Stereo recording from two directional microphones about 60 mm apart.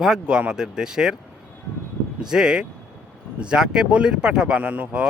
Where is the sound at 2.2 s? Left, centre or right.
Centre.